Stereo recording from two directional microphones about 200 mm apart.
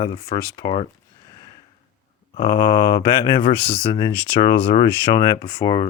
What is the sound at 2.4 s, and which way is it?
Speech, 20° left (ahead or behind).